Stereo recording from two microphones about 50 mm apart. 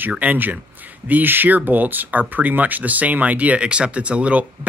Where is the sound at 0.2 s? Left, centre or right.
Right.